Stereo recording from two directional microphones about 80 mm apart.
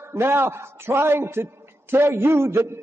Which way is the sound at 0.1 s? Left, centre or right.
Right.